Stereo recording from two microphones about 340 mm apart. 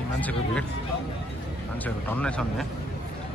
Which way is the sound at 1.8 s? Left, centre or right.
Centre.